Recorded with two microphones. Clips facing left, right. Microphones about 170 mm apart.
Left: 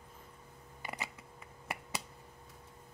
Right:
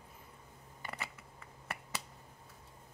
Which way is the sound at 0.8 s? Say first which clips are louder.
Left 2 dB; 15° left (ahead or behind).